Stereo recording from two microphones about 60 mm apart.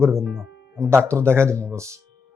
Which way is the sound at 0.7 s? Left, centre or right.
Right.